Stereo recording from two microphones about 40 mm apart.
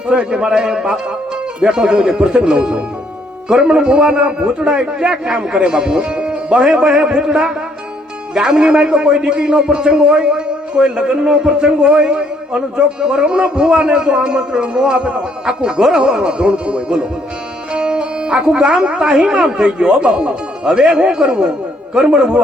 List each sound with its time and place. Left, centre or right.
0.1 s a man's voice: right
17.7 s music: right
18.4 s a man's voice: right